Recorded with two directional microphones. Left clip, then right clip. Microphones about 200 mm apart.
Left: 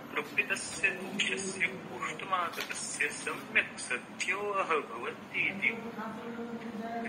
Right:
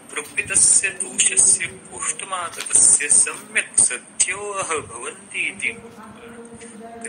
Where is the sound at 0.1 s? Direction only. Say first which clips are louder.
Right 7 dB; 20° right (ahead or behind).